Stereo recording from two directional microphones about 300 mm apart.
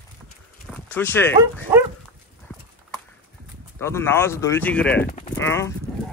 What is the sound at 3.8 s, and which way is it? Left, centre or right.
Speech, centre.